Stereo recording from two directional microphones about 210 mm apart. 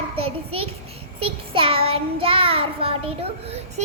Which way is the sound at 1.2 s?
25° right (ahead or behind).